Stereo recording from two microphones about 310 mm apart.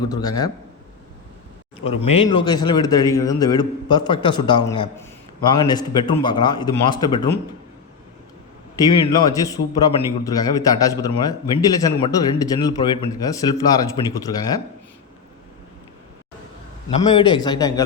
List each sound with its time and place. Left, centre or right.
0.1 s a man's voice: centre
1.8 s a man's voice: centre
8.7 s a man's voice: centre
16.9 s a man's voice: centre